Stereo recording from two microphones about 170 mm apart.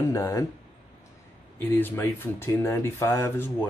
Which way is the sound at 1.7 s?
10° left (ahead or behind).